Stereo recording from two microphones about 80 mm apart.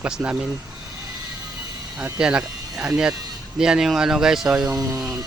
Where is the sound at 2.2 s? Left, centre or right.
Centre.